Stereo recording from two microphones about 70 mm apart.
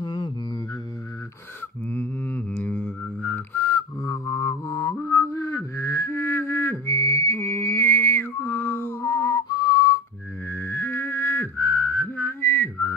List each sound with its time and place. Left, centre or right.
0.0 s music: left
1.9 s a sound: left
4.0 s music: left
5.0 s a sound: left
9.0 s music: left
10.5 s music: left